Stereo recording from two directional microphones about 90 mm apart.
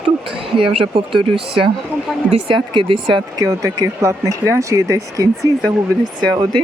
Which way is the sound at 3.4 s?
40° right (ahead or behind).